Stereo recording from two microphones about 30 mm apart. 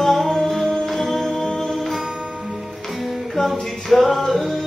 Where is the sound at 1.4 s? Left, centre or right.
Centre.